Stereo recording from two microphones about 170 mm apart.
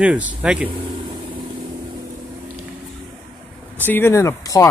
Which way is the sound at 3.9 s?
15° left (ahead or behind).